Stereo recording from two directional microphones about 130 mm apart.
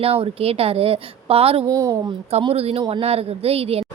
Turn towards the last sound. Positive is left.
turn(degrees=-50)  # may be behind; listen again after turning